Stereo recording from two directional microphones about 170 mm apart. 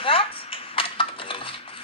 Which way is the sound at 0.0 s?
30° left (ahead or behind).